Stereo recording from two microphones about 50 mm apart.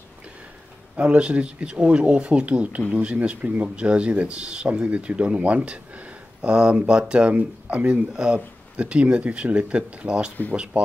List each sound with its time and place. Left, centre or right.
0.9 s speech: right